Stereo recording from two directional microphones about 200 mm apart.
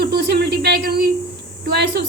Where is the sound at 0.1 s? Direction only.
55° right (ahead or behind).